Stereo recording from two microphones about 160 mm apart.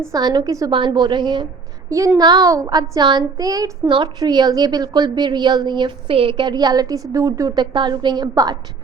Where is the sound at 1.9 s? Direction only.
20° right (ahead or behind).